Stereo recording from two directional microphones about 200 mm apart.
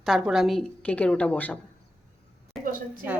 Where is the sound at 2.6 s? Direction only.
45° right (ahead or behind).